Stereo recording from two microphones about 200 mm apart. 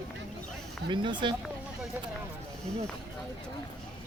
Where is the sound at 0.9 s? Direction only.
25° right (ahead or behind).